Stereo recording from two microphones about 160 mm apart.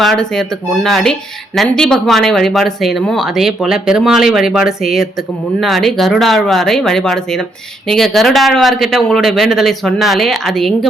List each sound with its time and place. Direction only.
0.0 s speech: centre (ahead or behind)